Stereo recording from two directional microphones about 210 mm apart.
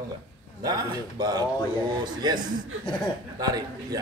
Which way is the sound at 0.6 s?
20° right (ahead or behind).